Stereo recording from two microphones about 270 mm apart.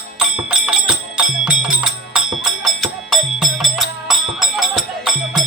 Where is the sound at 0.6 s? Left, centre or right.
Centre.